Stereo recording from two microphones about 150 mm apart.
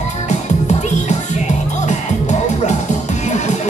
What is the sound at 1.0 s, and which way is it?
Music, 50° left (ahead or behind).